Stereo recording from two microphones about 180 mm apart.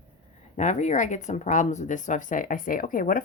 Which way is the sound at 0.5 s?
45° left (ahead or behind).